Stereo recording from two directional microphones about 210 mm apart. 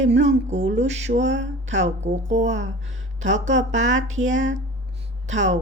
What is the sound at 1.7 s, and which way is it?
Speech, 35° right (ahead or behind).